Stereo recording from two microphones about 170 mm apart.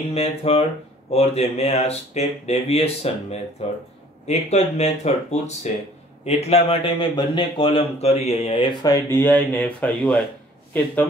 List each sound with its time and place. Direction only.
0.0 s a man's voice: 35° left (ahead or behind); by 10.2 s 5° left (ahead or behind)